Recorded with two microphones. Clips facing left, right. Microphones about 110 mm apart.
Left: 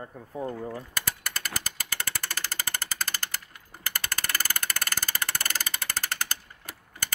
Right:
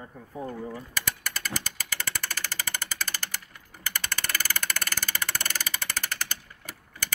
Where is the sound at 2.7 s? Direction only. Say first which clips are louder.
Left 1 dB; 45° left (ahead or behind).